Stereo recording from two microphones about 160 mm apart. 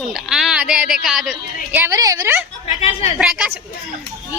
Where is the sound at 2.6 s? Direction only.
40° left (ahead or behind).